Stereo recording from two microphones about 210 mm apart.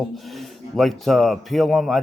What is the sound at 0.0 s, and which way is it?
Speech, centre (ahead or behind).